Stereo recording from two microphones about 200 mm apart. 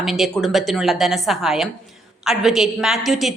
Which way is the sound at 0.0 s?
Centre (ahead or behind).